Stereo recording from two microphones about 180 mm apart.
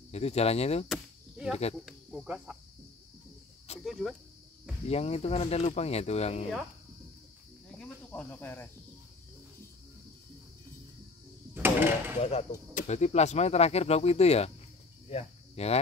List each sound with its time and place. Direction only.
0.1 s speech: 35° left (ahead or behind)
0.8 s cricket: centre (ahead or behind)
1.9 s speech: 5° right (ahead or behind)
3.8 s speech: centre (ahead or behind)
4.8 s speech: 35° left (ahead or behind)
7.8 s cricket: 10° left (ahead or behind)
11.5 s a sound: 10° right (ahead or behind)
12.2 s speech: 35° left (ahead or behind)
15.0 s cricket: 35° left (ahead or behind)